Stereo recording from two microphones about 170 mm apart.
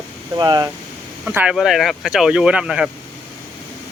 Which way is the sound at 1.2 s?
5° right (ahead or behind).